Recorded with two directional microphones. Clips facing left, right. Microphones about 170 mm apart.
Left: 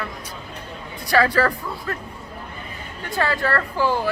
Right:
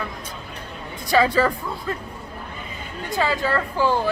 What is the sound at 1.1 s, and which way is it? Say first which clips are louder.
Speech: even; 20° right (ahead or behind).